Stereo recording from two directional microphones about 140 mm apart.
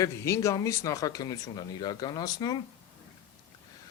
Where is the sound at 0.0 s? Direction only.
20° left (ahead or behind).